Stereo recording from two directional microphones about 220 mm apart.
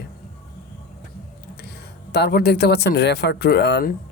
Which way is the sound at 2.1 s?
45° left (ahead or behind).